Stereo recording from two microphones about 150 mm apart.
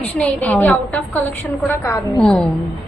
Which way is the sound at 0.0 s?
10° left (ahead or behind).